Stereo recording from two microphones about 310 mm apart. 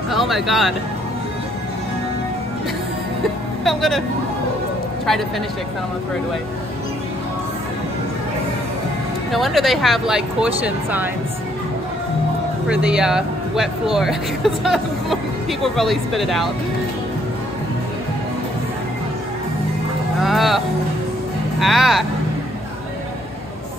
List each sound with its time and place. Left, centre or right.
0.1 s speech: centre
3.6 s speech: centre
9.3 s speech: centre
12.6 s speech: centre
20.2 s speech: centre